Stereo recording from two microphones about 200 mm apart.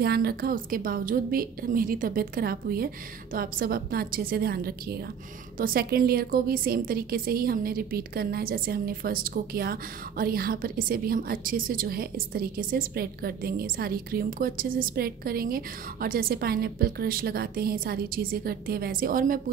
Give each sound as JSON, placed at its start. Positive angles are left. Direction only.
{"t": 0.0, "sound": "a woman's voice", "side_deg": -50}